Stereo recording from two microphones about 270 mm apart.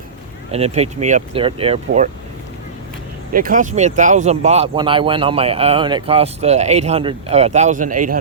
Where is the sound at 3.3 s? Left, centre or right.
Right.